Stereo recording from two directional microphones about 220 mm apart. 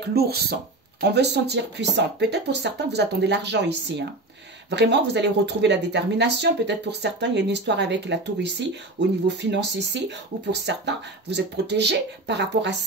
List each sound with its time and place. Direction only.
0.1 s speech: 45° right (ahead or behind)